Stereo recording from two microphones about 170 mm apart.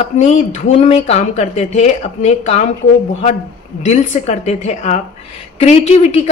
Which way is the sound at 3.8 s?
40° left (ahead or behind).